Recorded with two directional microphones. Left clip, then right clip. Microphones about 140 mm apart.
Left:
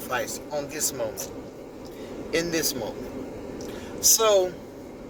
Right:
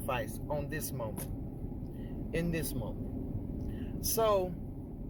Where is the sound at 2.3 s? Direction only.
15° left (ahead or behind).